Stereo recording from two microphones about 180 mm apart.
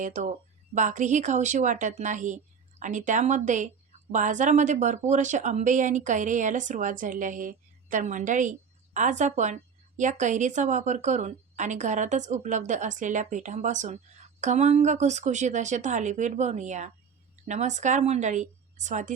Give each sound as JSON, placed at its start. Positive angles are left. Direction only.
{"t": 0.0, "sound": "a woman's voice", "side_deg": -45}